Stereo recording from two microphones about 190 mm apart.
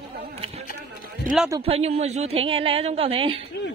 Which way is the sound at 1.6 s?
30° right (ahead or behind).